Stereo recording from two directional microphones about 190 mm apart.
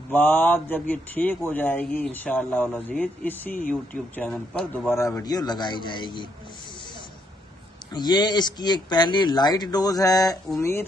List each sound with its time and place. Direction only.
0.1 s speech: 10° left (ahead or behind)
7.9 s speech: 20° left (ahead or behind)